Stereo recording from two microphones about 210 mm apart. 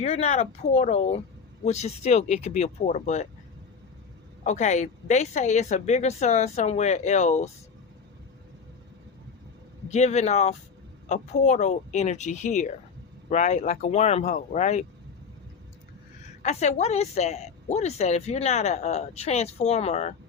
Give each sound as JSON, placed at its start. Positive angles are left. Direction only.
{"t": 0.0, "sound": "a woman's voice", "side_deg": 30}
{"t": 4.4, "sound": "a woman's voice", "side_deg": 35}
{"t": 9.9, "sound": "a woman's voice", "side_deg": 30}
{"t": 16.4, "sound": "a woman's voice", "side_deg": 35}